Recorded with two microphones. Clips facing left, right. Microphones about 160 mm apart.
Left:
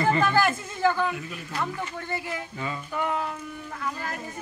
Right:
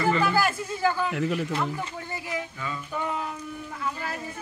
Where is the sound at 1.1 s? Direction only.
80° right.